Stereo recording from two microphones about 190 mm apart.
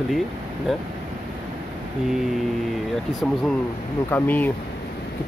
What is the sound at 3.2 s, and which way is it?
Speech, 5° left (ahead or behind).